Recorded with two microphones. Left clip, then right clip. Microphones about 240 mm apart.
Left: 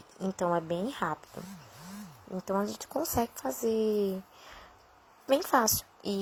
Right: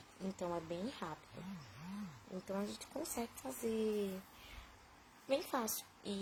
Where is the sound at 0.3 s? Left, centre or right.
Left.